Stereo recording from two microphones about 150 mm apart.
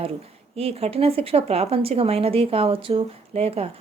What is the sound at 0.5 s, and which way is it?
Speech, 40° right (ahead or behind).